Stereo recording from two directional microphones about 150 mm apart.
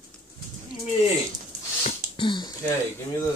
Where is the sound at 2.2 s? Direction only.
30° left (ahead or behind).